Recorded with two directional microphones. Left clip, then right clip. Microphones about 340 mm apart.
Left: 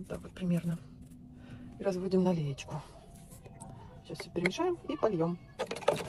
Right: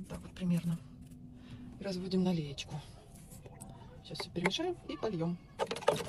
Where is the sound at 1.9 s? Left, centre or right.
Centre.